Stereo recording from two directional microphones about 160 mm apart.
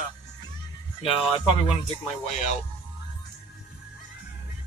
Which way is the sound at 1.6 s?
40° left (ahead or behind).